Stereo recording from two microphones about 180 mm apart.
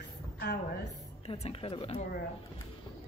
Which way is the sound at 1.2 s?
35° left (ahead or behind).